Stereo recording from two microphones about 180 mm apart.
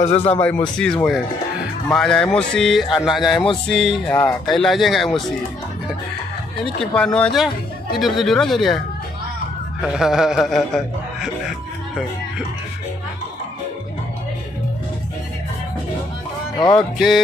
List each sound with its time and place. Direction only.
0.0 s speech: 35° left (ahead or behind)
0.3 s a man's voice: 10° left (ahead or behind)
6.8 s a man's voice: 5° left (ahead or behind)
9.9 s a man's voice: centre (ahead or behind)
16.5 s speech: 25° left (ahead or behind)